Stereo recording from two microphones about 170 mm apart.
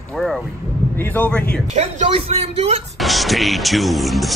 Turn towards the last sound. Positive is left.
turn(degrees=0)  # may be behind; listen again after turning